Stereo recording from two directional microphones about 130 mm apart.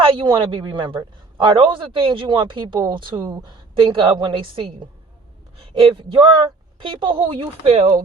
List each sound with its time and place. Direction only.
0.0 s a man's voice: 40° right (ahead or behind)